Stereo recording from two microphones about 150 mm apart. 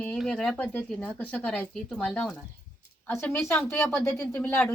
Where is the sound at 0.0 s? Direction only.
5° left (ahead or behind).